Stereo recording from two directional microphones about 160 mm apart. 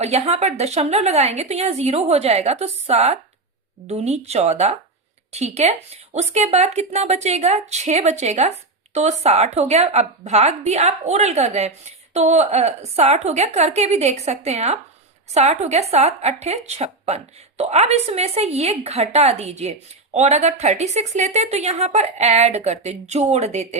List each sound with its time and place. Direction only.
0.0 s a woman's voice: 40° right (ahead or behind)